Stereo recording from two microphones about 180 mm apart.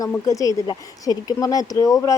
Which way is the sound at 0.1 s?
20° left (ahead or behind).